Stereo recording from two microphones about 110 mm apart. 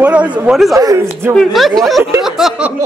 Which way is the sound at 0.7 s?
30° right (ahead or behind).